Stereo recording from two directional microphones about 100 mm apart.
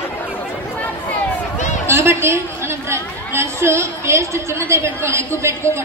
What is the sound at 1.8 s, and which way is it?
A woman's voice, 25° right (ahead or behind).